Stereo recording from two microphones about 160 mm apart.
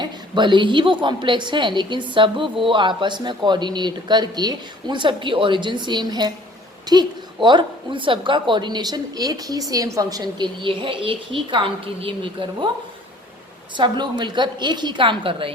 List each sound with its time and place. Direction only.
0.0 s a woman's voice: 30° right (ahead or behind)
13.7 s a woman's voice: 30° right (ahead or behind)